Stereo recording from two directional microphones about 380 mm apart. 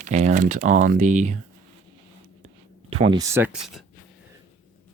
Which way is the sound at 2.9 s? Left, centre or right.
Centre.